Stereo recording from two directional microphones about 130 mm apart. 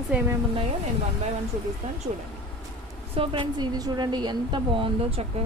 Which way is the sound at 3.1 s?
35° right (ahead or behind).